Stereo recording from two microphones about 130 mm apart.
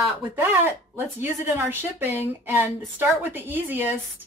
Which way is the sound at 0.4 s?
15° right (ahead or behind).